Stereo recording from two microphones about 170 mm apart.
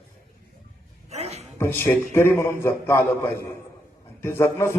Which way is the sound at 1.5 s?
15° left (ahead or behind).